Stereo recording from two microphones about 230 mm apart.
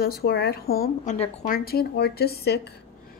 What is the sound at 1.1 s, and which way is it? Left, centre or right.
A woman's voice, left.